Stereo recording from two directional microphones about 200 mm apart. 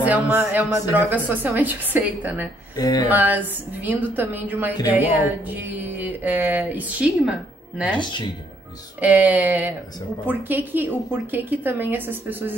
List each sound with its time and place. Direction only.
0.0 s music: 10° right (ahead or behind)
2.7 s speech: 20° left (ahead or behind)
3.1 s music: 10° right (ahead or behind)
9.0 s music: 10° right (ahead or behind)